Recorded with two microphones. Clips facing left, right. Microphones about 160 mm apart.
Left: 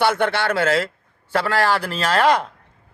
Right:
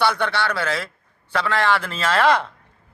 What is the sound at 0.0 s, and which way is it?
A man's voice, 50° left (ahead or behind).